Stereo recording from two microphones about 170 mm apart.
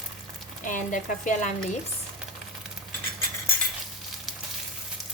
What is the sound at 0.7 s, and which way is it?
Speech, 50° left (ahead or behind).